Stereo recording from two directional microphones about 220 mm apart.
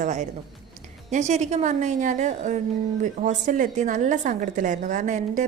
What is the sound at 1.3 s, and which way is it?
A woman's voice, 30° right (ahead or behind).